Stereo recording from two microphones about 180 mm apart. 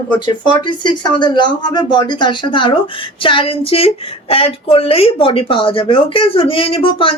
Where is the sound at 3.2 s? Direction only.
30° left (ahead or behind).